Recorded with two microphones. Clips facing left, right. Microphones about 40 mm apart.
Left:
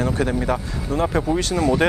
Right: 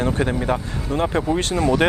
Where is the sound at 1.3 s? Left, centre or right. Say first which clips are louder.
Even; right.